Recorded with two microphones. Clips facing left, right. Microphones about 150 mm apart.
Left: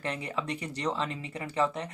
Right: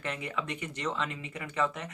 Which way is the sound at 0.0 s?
35° left (ahead or behind).